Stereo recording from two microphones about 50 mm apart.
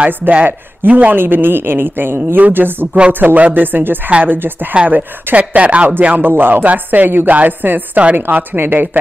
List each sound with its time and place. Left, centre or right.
0.2 s speech: right
1.1 s a woman's voice: right